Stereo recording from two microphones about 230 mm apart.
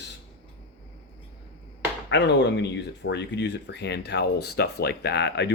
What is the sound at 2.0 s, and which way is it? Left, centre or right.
Speech, left.